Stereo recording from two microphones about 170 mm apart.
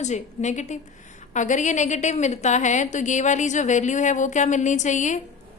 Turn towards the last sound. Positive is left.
turn(degrees=45)  # may be behind; listen again after turning